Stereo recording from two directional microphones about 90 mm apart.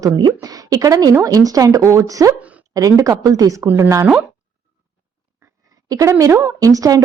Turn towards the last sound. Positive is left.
turn(degrees=-40)  # may be behind; listen again after turning